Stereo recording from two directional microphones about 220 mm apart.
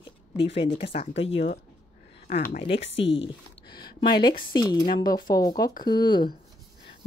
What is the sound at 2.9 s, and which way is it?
Speech, 55° left (ahead or behind).